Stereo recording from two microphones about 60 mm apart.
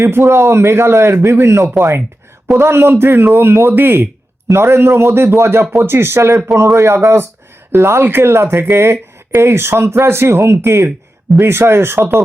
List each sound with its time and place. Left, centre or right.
0.1 s a man's voice: right
4.4 s a man's voice: right